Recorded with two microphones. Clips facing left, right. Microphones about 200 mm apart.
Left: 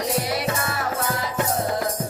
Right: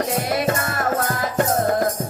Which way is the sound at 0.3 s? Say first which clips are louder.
Right 4 dB; 50° right (ahead or behind).